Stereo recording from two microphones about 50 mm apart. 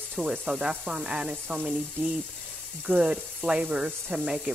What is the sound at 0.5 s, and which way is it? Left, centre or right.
Speech, centre.